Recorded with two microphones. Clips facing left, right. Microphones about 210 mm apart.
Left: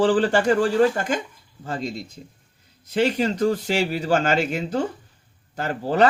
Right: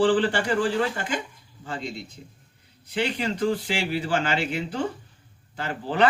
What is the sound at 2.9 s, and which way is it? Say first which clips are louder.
Speech: left 6 dB; 45° left (ahead or behind).